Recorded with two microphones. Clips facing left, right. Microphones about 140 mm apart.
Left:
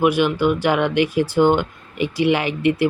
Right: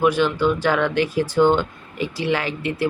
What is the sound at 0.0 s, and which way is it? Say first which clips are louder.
Speech: left 1 dB; 15° left (ahead or behind).